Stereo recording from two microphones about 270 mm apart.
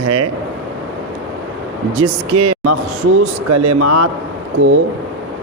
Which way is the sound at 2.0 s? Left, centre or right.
Right.